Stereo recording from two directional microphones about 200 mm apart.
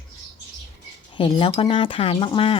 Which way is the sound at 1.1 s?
25° left (ahead or behind).